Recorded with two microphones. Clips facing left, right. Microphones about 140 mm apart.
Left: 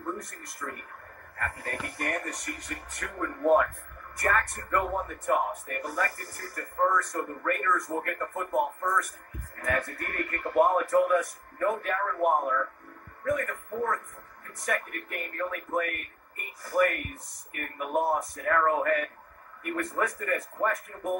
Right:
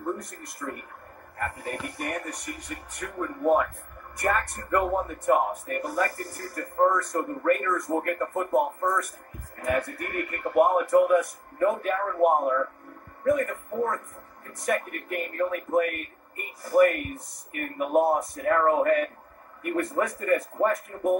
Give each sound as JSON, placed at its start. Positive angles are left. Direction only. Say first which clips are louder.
{"t": 0.0, "sound": "speech", "louder": "right 4 dB", "side_deg": -15}
{"t": 9.6, "sound": "a man's voice", "louder": "right 4 dB", "side_deg": -15}
{"t": 18.3, "sound": "speech", "louder": "right 3 dB", "side_deg": -30}